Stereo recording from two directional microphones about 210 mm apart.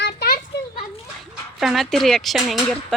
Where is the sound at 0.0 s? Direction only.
50° left (ahead or behind).